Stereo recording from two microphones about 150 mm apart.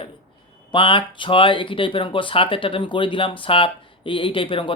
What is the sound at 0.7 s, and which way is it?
Speech, 35° left (ahead or behind).